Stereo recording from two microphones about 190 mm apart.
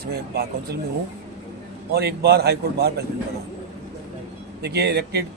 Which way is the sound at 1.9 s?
55° right (ahead or behind).